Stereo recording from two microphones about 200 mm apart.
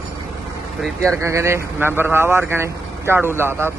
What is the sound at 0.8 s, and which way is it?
Speech, 5° left (ahead or behind).